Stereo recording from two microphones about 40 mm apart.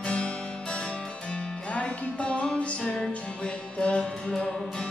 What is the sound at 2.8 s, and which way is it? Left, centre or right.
Music, left.